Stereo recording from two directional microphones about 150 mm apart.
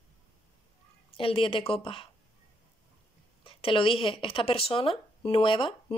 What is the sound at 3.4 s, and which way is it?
Speech, 35° left (ahead or behind).